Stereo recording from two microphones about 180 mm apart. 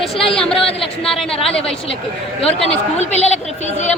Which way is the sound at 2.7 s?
35° left (ahead or behind).